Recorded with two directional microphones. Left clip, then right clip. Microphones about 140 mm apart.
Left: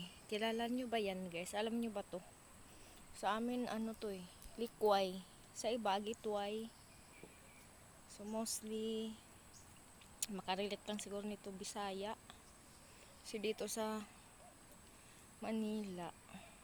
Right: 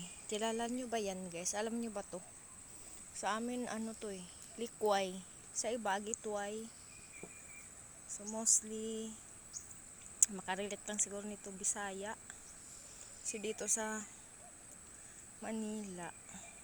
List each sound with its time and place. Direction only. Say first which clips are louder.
0.0 s speech: right 2 dB; 5° right (ahead or behind); by 6.7 s 15° left (ahead or behind)
8.1 s speech: right 8 dB; 15° left (ahead or behind)
10.2 s speech: right 4 dB; 10° left (ahead or behind)
15.4 s speech: even; 15° left (ahead or behind)